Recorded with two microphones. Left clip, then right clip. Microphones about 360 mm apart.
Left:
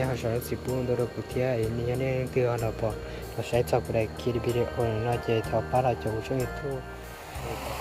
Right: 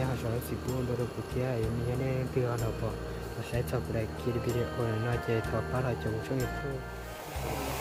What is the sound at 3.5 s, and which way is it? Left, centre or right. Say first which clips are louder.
Music: left 9 dB; centre.